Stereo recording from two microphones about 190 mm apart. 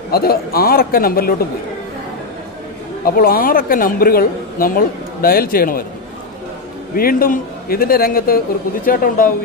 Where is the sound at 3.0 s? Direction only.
50° left (ahead or behind).